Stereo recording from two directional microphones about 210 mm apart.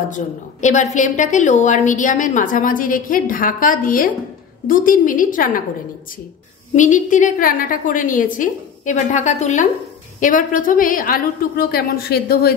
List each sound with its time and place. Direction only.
0.1 s a woman's voice: 35° left (ahead or behind)
6.7 s a woman's voice: 35° left (ahead or behind)